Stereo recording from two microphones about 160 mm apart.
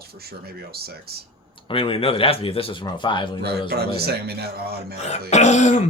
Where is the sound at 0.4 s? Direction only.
75° right (ahead or behind).